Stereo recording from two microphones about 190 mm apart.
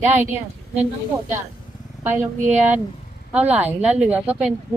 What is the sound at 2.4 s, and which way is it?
Speech, 40° right (ahead or behind).